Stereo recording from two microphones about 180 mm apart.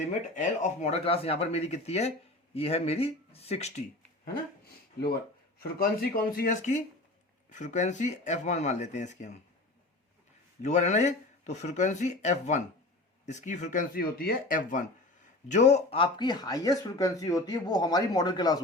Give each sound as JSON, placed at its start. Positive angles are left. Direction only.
{"t": 0.1, "sound": "speech", "side_deg": 40}
{"t": 6.0, "sound": "speech", "side_deg": 55}
{"t": 10.6, "sound": "speech", "side_deg": 40}